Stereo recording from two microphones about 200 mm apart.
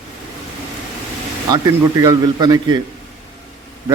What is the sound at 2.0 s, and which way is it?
Speech, 15° right (ahead or behind).